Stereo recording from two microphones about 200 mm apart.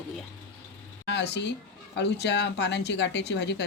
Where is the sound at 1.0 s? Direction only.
60° left (ahead or behind).